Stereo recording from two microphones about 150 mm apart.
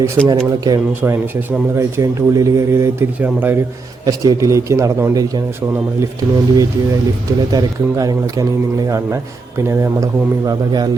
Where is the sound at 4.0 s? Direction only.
25° right (ahead or behind).